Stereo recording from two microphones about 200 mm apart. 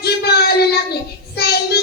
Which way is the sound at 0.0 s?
55° left (ahead or behind).